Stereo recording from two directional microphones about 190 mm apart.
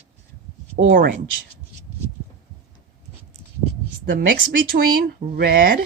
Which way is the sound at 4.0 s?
45° right (ahead or behind).